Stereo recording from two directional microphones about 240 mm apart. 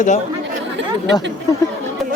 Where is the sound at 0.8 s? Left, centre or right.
Right.